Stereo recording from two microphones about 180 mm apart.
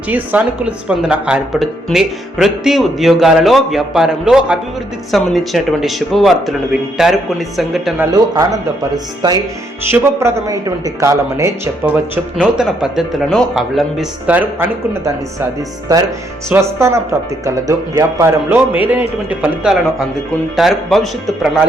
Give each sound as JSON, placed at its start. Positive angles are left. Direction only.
{"t": 0.1, "sound": "speech", "side_deg": -10}
{"t": 8.0, "sound": "a man's voice", "side_deg": -20}
{"t": 9.9, "sound": "speech", "side_deg": -15}
{"t": 16.5, "sound": "speech", "side_deg": -15}